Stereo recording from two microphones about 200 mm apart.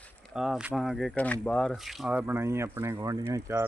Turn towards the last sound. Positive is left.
turn(degrees=-15)  # may be behind; listen again after turning